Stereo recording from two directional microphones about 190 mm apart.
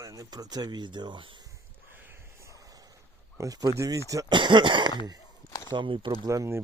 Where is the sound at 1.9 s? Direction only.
10° right (ahead or behind).